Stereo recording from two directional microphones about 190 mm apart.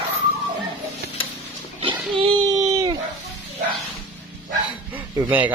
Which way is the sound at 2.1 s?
25° right (ahead or behind).